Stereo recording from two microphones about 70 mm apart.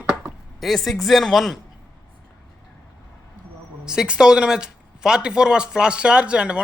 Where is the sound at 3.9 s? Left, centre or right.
Centre.